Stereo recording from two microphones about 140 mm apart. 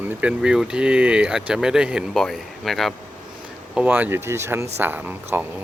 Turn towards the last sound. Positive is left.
turn(degrees=-15)  # may be behind; listen again after turning